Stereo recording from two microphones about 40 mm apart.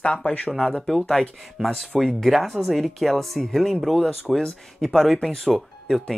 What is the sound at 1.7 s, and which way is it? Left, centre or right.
Speech, centre.